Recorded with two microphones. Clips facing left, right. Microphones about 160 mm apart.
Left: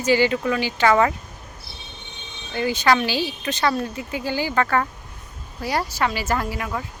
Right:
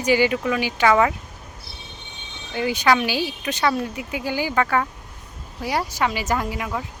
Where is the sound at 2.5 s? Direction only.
15° right (ahead or behind).